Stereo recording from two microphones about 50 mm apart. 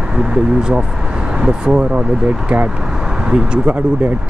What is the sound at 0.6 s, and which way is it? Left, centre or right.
Speech, centre.